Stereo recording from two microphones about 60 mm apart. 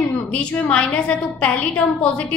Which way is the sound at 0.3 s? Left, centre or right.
Centre.